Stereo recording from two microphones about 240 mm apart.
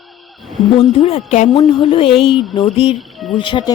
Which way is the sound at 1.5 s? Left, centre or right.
Centre.